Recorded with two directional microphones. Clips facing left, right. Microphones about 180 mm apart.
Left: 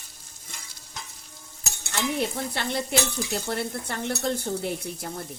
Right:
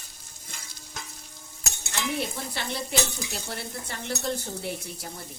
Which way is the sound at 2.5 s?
55° left (ahead or behind).